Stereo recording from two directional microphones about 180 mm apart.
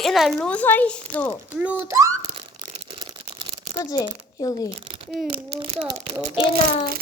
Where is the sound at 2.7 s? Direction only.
30° right (ahead or behind).